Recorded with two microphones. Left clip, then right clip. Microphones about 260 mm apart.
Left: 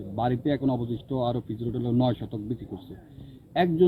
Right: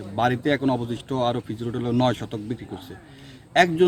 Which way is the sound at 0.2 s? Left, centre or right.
Centre.